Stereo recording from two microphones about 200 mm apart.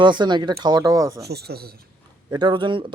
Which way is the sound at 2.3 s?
20° right (ahead or behind).